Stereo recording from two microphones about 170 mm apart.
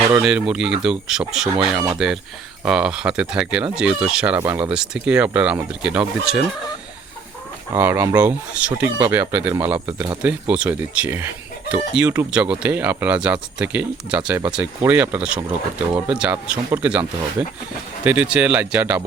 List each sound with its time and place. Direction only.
0.1 s speech: 5° right (ahead or behind)
4.4 s speech: 15° right (ahead or behind)
4.7 s speech: 5° right (ahead or behind)
7.7 s speech: 10° right (ahead or behind)